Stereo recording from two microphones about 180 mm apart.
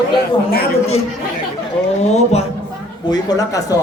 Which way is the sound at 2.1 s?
35° left (ahead or behind).